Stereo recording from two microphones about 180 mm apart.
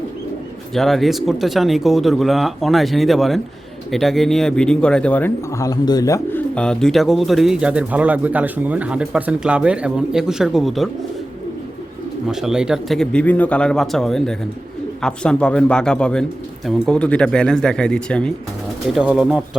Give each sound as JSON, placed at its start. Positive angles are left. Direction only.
{"t": 0.7, "sound": "speech", "side_deg": 0}
{"t": 6.5, "sound": "speech", "side_deg": 5}
{"t": 12.3, "sound": "speech", "side_deg": -5}